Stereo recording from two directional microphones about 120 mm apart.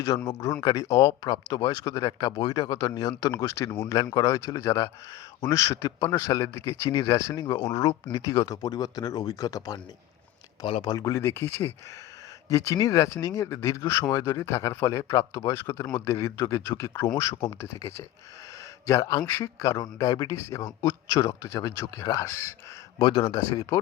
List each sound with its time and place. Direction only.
0.1 s speech: 40° left (ahead or behind)
0.6 s speech: 30° left (ahead or behind)
10.9 s speech: 30° left (ahead or behind)
23.0 s speech: 40° left (ahead or behind)
23.4 s speech: 30° left (ahead or behind)